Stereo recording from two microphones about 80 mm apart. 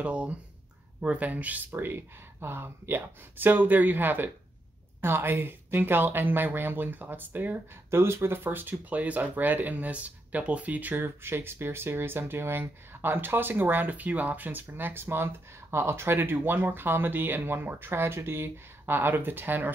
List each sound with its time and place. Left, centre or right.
0.0 s speech: centre